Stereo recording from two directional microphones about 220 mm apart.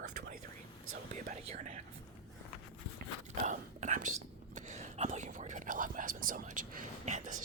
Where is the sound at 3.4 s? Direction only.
35° right (ahead or behind).